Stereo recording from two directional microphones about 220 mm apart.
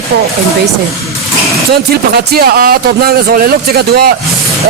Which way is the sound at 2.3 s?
45° right (ahead or behind).